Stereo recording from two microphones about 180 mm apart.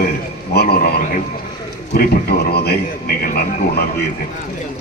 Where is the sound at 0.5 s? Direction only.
60° left (ahead or behind).